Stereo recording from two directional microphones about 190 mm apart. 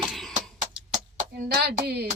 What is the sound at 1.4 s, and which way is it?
Speech, 55° right (ahead or behind).